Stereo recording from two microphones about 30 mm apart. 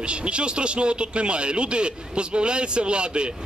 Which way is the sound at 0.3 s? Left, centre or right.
Right.